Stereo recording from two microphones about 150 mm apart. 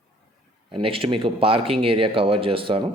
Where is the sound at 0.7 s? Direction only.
35° right (ahead or behind).